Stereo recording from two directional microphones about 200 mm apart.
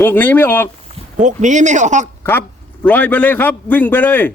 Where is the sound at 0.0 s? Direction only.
10° left (ahead or behind).